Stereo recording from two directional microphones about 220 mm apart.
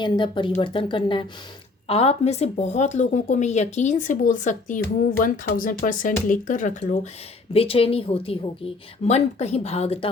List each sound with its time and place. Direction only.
0.0 s a woman's voice: 20° left (ahead or behind)